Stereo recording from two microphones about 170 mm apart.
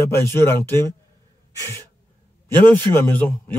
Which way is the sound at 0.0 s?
15° left (ahead or behind).